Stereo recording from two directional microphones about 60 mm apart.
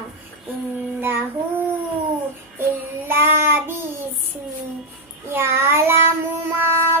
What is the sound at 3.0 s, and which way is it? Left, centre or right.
Child singing, right.